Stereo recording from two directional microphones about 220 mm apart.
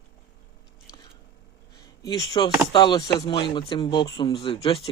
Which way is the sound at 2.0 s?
15° left (ahead or behind).